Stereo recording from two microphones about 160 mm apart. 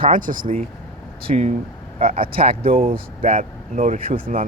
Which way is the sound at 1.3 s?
50° right (ahead or behind).